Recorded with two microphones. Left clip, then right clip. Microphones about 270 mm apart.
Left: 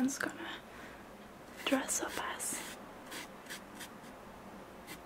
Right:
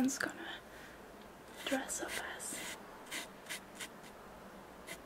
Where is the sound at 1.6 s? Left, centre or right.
Centre.